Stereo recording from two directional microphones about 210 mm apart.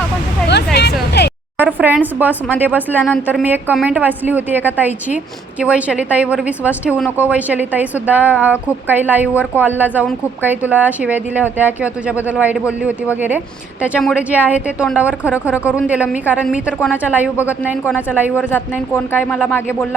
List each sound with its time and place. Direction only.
0.4 s hubbub: 55° left (ahead or behind)
1.5 s a woman's voice: 10° right (ahead or behind)
18.5 s speech: 10° left (ahead or behind)